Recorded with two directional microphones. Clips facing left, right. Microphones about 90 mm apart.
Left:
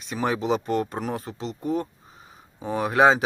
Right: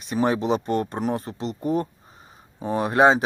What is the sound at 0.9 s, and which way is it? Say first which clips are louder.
Speech: right 4 dB; 30° right (ahead or behind).